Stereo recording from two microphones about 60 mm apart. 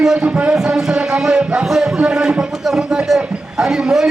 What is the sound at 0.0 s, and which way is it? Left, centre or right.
Speech, centre.